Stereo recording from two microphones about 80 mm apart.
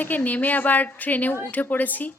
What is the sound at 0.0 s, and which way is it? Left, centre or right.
A woman's voice, left.